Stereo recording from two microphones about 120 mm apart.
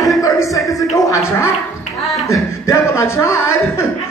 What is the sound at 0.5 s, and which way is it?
Speech, centre (ahead or behind).